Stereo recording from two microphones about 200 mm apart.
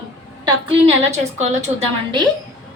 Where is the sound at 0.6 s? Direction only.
35° right (ahead or behind).